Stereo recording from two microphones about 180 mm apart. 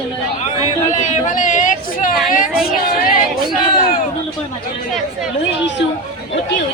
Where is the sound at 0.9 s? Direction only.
40° left (ahead or behind).